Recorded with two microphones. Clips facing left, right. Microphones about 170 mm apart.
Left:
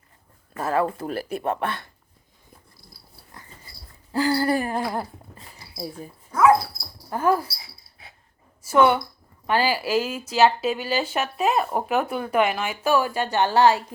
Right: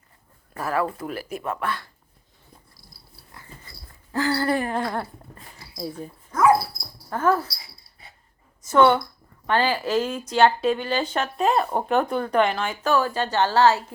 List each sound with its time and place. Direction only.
0.5 s speech: 25° left (ahead or behind)
4.1 s a sound: 15° left (ahead or behind)
4.7 s speech: 10° left (ahead or behind)
7.1 s speech: 15° left (ahead or behind)
8.6 s a woman's voice: 10° left (ahead or behind)